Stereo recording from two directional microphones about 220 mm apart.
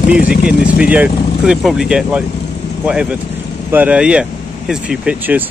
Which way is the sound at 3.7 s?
5° right (ahead or behind).